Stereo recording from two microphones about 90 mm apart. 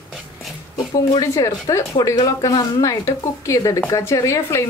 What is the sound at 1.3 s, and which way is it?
A woman's voice, 40° left (ahead or behind).